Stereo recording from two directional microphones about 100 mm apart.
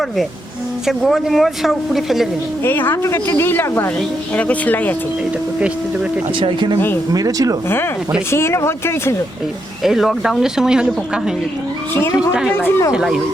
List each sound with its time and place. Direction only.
0.9 s speech: centre (ahead or behind)
2.6 s speech: 20° left (ahead or behind)
6.4 s speech: 55° right (ahead or behind)
7.1 s speech: 35° right (ahead or behind)
8.3 s speech: 25° left (ahead or behind)
9.8 s speech: 5° right (ahead or behind)
12.5 s speech: 20° left (ahead or behind)
12.9 s speech: 5° right (ahead or behind)